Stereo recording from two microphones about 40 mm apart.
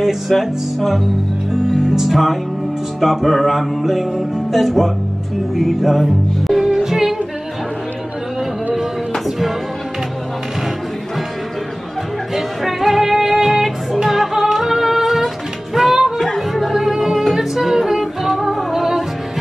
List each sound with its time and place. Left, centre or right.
0.3 s music: centre
2.0 s music: centre
12.4 s music: centre